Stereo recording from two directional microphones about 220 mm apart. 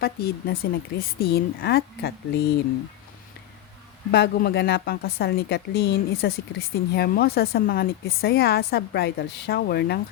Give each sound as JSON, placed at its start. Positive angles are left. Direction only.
{"t": 0.0, "sound": "speech", "side_deg": 45}
{"t": 4.1, "sound": "speech", "side_deg": 45}